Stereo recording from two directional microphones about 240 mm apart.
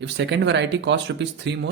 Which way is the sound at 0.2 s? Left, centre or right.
Right.